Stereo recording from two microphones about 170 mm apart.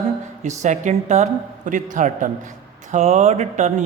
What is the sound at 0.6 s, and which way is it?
Speech, 45° right (ahead or behind).